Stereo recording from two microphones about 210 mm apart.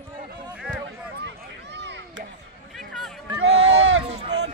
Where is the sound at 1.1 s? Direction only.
55° right (ahead or behind).